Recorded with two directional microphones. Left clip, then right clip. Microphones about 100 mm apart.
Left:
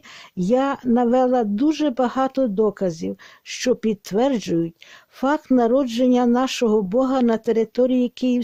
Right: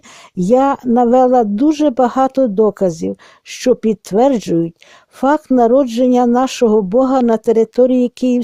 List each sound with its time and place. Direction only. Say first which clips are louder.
0.3 s speech: right 8 dB; 45° right (ahead or behind)